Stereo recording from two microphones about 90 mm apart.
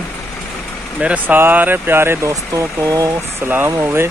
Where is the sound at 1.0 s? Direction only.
20° right (ahead or behind).